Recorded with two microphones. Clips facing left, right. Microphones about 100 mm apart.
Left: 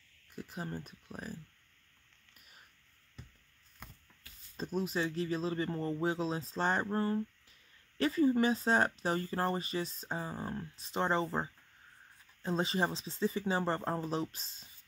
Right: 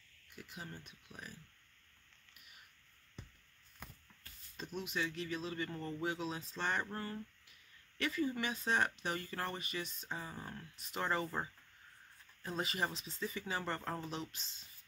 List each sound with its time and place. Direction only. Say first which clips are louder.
0.3 s speech: left 8 dB; 40° left (ahead or behind)
2.3 s a sound: left 1 dB; 40° left (ahead or behind)
4.6 s speech: left 6 dB; 35° left (ahead or behind)